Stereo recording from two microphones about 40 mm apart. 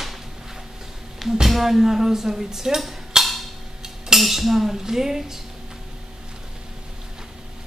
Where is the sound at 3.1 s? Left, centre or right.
Centre.